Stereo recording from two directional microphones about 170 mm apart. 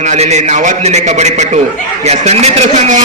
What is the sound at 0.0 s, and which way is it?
A man's voice, 40° right (ahead or behind).